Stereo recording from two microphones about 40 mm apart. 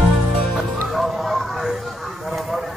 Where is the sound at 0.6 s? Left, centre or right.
Centre.